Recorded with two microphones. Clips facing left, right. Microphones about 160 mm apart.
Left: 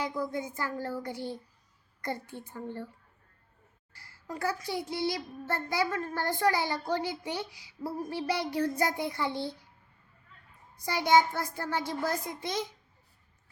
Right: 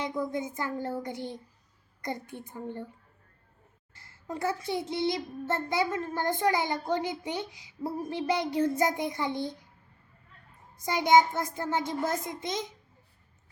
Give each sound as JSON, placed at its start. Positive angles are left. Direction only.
{"t": 0.0, "sound": "a child's voice", "side_deg": -20}
{"t": 3.9, "sound": "a child's voice", "side_deg": -25}
{"t": 10.8, "sound": "a child's voice", "side_deg": -20}